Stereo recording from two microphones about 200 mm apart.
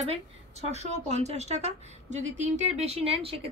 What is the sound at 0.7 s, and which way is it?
A woman's voice, 35° right (ahead or behind).